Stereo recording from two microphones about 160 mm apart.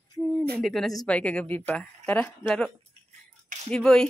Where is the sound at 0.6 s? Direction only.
Centre (ahead or behind).